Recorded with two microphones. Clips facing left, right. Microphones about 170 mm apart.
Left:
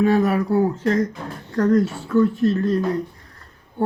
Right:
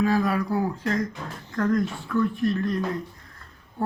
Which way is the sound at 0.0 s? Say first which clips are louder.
Left 5 dB; 25° left (ahead or behind).